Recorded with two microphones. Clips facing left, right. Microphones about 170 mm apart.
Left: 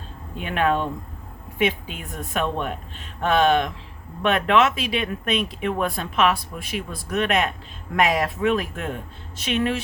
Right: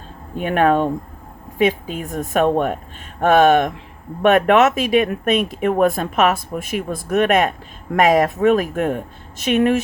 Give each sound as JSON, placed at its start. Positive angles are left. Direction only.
{"t": 0.3, "sound": "speech", "side_deg": -45}